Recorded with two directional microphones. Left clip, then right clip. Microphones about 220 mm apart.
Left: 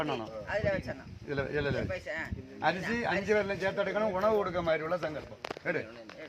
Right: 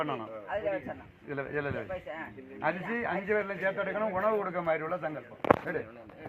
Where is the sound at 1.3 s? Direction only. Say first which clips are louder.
Left 2 dB; 55° left (ahead or behind).